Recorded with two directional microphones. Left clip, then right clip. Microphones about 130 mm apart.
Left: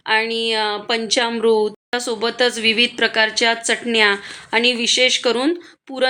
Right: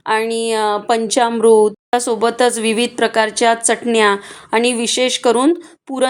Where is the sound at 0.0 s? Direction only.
35° right (ahead or behind).